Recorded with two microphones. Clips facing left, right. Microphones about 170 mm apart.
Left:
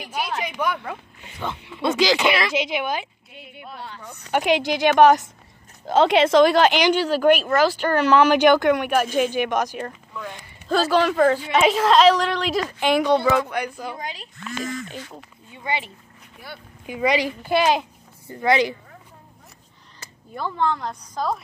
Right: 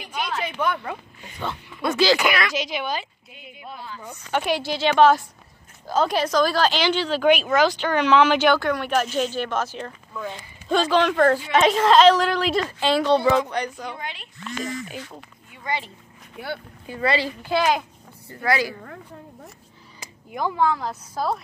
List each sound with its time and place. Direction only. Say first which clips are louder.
0.0 s speech: left 1 dB; 5° left (ahead or behind)
4.3 s a woman's voice: left 4 dB; 15° left (ahead or behind); by 12.6 s centre (ahead or behind)
12.6 s speech: left 1 dB; 15° left (ahead or behind)
13.9 s speech: left 2 dB; 40° left (ahead or behind)
15.5 s a sound: left 1 dB; 25° left (ahead or behind)
16.8 s speech: left 2 dB; 15° left (ahead or behind)
20.0 s speech: right 3 dB; 15° right (ahead or behind)